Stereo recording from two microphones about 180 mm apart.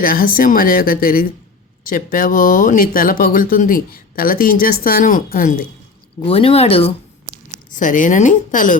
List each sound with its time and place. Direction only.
0.0 s speech: 55° left (ahead or behind)
6.2 s speech: 30° left (ahead or behind)
7.7 s speech: 45° left (ahead or behind)